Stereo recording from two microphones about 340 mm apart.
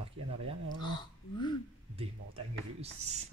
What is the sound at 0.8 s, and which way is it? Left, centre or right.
Speech, centre.